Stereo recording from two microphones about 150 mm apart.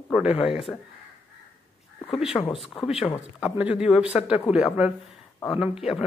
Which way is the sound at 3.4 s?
5° right (ahead or behind).